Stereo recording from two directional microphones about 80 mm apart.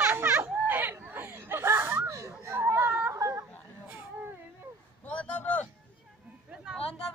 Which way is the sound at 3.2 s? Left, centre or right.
Right.